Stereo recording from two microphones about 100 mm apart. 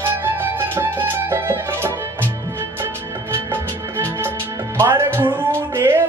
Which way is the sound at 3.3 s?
25° right (ahead or behind).